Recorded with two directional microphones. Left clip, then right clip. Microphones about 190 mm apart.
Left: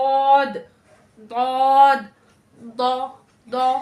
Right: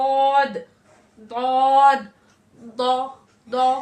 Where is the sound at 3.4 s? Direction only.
20° left (ahead or behind).